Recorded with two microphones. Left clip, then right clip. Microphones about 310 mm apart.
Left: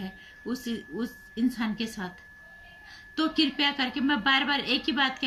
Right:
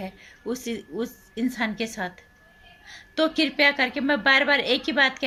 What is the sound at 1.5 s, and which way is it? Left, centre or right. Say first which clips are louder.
Speech: right 5 dB; centre.